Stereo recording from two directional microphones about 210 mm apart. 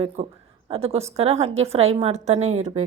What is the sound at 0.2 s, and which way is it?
A woman's voice, 30° right (ahead or behind).